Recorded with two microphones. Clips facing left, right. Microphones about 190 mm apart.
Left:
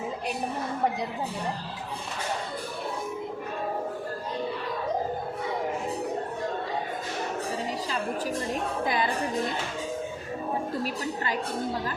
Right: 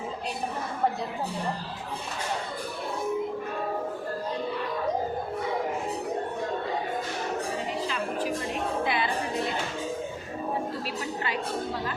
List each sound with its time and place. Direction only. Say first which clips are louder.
8.8 s music: left 1 dB; 40° left (ahead or behind)